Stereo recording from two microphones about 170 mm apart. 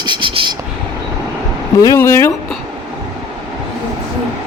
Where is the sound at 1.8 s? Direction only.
15° left (ahead or behind).